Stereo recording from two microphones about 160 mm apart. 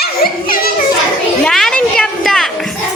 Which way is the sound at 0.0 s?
70° left (ahead or behind).